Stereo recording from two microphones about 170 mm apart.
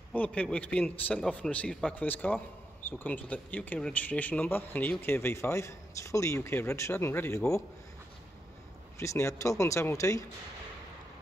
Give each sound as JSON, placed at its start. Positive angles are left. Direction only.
{"t": 0.1, "sound": "speech", "side_deg": 10}
{"t": 8.9, "sound": "speech", "side_deg": 15}